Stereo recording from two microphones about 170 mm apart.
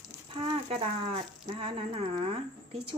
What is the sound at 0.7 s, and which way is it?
Speech, 35° right (ahead or behind).